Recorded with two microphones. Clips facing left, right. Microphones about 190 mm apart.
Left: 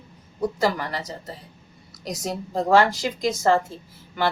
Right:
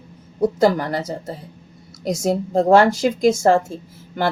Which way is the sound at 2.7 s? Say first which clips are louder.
Right 4 dB; 50° right (ahead or behind).